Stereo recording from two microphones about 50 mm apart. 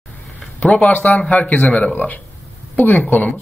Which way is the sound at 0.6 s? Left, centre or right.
Left.